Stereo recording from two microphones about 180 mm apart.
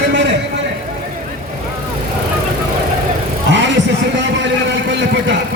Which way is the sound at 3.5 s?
85° right.